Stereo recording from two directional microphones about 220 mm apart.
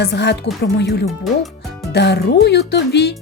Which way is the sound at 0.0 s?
50° left (ahead or behind).